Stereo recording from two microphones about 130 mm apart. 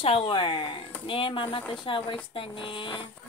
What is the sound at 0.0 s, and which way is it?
Speech, 45° left (ahead or behind).